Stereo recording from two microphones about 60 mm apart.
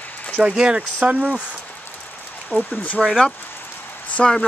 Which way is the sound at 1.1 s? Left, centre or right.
Right.